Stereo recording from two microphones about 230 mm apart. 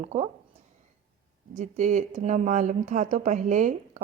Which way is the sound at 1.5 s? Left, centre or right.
Right.